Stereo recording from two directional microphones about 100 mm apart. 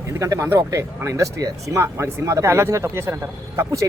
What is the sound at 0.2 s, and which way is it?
Speech, 30° right (ahead or behind).